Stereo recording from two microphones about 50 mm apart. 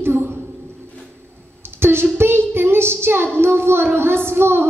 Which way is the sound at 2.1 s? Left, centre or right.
Right.